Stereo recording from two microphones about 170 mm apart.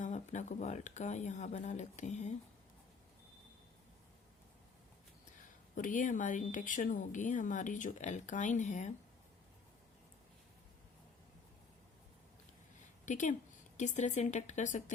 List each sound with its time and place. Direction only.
0.0 s speech: 45° left (ahead or behind)
5.4 s speech: 50° left (ahead or behind)
13.1 s speech: 45° left (ahead or behind)